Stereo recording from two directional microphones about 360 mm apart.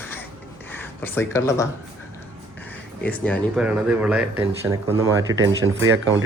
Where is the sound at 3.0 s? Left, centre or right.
Centre.